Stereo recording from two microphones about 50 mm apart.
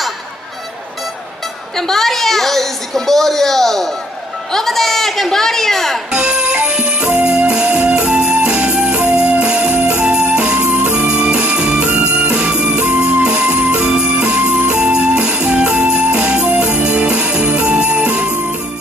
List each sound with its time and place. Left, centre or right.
1.8 s a woman's voice: centre
6.1 s music: centre
16.9 s jingle bell: right